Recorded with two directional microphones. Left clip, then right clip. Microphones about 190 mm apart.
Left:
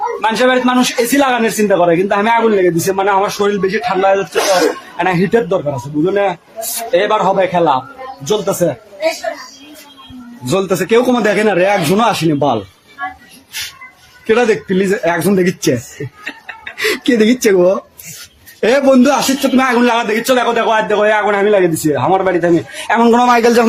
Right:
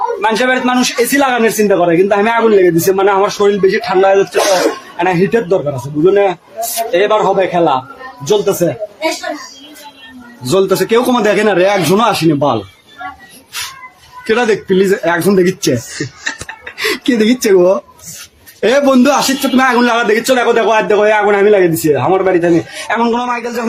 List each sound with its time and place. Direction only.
0.2 s a man's voice: centre (ahead or behind)
10.5 s a man's voice: centre (ahead or behind)
14.3 s a man's voice: centre (ahead or behind)
16.2 s chicken: centre (ahead or behind)
18.6 s a man's voice: centre (ahead or behind)
22.9 s a man's voice: 20° left (ahead or behind)
23.1 s a man's voice: 35° left (ahead or behind)